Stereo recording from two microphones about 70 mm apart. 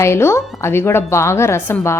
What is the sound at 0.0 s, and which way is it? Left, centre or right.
A woman's voice, left.